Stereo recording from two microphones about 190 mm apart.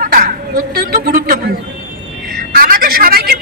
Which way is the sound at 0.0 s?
45° right (ahead or behind).